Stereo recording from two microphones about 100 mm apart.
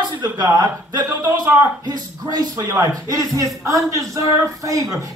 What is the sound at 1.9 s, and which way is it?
A man's voice, 40° right (ahead or behind).